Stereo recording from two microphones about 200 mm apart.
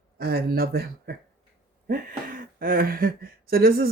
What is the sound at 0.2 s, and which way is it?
Speech, 50° right (ahead or behind).